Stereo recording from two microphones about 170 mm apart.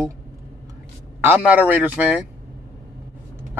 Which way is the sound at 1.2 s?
10° right (ahead or behind).